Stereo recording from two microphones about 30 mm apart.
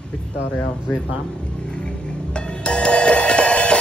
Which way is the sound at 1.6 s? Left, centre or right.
Left.